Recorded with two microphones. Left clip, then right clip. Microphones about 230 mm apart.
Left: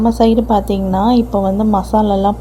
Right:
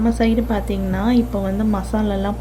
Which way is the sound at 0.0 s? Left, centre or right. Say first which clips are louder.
Left 7 dB; centre.